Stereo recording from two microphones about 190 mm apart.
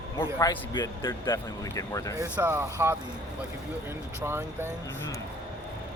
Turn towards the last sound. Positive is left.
turn(degrees=-10)  # may be behind; listen again after turning